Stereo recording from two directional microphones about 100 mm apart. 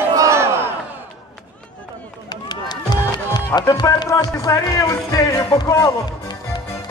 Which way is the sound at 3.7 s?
45° left (ahead or behind).